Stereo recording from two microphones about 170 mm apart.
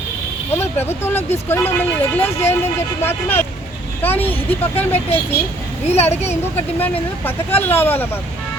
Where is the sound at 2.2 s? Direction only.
40° left (ahead or behind).